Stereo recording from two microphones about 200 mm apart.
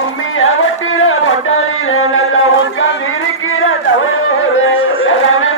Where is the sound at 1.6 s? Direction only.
90° left.